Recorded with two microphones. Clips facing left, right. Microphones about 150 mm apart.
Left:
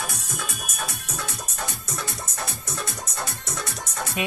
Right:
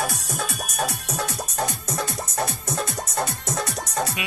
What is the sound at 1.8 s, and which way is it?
Music, 35° right (ahead or behind).